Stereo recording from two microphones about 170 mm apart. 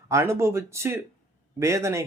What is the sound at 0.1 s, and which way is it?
Speech, 15° right (ahead or behind).